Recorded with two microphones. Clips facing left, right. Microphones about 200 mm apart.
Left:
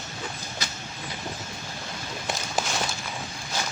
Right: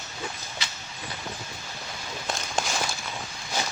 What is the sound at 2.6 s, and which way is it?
Walk, 5° left (ahead or behind).